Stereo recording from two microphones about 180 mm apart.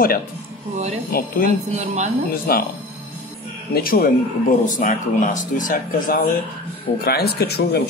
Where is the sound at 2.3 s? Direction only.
55° left (ahead or behind).